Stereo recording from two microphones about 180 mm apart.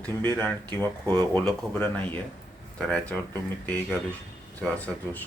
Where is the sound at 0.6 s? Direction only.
25° right (ahead or behind).